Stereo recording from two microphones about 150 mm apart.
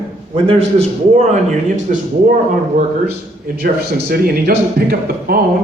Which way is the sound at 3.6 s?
90° right.